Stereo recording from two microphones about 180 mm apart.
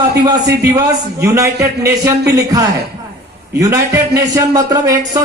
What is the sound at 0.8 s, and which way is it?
A man's voice, 15° right (ahead or behind).